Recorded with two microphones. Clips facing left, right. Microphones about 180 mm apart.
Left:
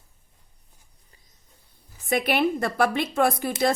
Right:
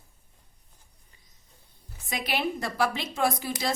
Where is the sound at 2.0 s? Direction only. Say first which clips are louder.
Left 7 dB; 55° left (ahead or behind).